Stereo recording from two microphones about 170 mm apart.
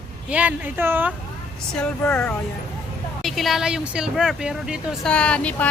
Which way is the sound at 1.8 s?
10° left (ahead or behind).